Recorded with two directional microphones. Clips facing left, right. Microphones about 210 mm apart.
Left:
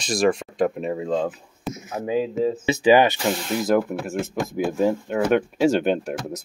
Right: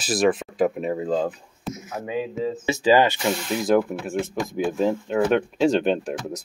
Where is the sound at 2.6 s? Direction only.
20° left (ahead or behind).